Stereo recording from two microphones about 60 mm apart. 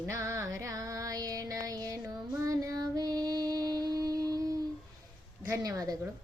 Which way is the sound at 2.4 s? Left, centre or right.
Right.